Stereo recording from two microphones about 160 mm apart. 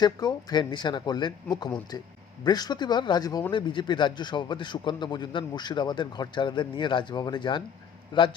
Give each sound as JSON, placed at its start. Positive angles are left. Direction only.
{"t": 0.0, "sound": "a man's voice", "side_deg": 25}